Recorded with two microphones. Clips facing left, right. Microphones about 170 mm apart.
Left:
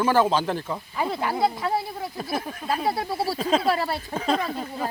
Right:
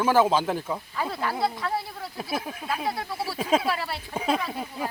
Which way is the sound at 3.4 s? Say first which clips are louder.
Right 1 dB; 10° right (ahead or behind).